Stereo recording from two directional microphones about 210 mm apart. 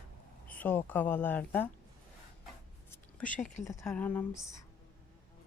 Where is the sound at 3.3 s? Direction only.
35° left (ahead or behind).